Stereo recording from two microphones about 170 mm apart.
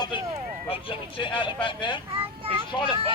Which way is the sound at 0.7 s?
30° left (ahead or behind).